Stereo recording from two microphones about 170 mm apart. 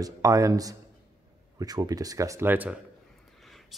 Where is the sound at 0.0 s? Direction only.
20° right (ahead or behind).